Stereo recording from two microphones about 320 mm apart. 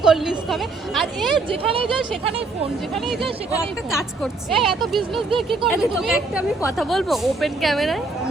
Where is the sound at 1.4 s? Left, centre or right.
Centre.